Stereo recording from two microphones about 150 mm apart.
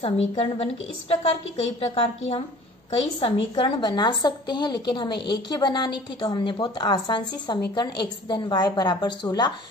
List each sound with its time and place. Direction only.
0.0 s a woman's voice: 40° left (ahead or behind)
1.8 s a woman's voice: 40° left (ahead or behind)